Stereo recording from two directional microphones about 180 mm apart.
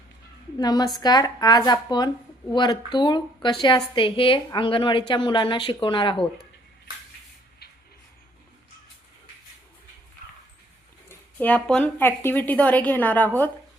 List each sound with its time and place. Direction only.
0.6 s a woman's voice: 20° left (ahead or behind)
11.1 s a woman's voice: 10° left (ahead or behind)